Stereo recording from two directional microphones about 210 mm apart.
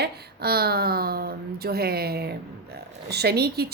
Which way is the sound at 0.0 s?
50° right (ahead or behind).